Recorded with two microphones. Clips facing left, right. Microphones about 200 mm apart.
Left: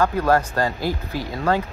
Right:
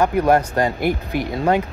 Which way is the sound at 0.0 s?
15° right (ahead or behind).